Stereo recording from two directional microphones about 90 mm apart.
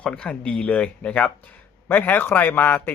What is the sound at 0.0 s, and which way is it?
Speech, 15° left (ahead or behind).